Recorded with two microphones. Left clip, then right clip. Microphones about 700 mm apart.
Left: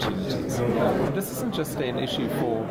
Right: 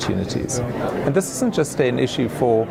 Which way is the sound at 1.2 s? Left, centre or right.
Right.